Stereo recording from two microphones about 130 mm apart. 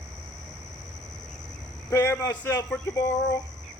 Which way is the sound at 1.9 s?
20° left (ahead or behind).